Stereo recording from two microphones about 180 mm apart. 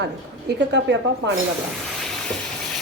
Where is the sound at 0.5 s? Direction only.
80° right.